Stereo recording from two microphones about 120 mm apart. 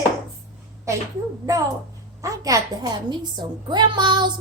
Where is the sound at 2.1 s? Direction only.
30° right (ahead or behind).